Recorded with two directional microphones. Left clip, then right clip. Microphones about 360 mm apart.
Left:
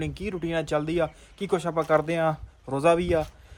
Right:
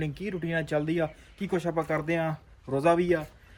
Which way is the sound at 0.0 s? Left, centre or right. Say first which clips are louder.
Left 2 dB; centre.